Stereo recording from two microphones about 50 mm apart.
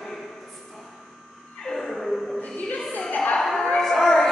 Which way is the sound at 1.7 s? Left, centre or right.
Centre.